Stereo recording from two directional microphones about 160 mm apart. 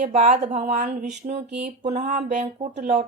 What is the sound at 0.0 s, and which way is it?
Speech, 45° right (ahead or behind).